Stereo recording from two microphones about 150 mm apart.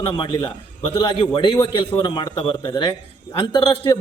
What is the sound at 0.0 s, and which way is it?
A man's voice, 35° left (ahead or behind).